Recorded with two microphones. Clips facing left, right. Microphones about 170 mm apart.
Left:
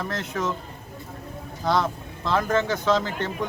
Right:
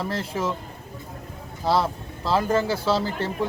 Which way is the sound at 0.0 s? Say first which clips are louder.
Right 1 dB; 30° right (ahead or behind).